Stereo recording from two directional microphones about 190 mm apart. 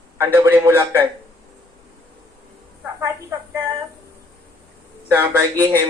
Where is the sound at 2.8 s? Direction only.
15° right (ahead or behind).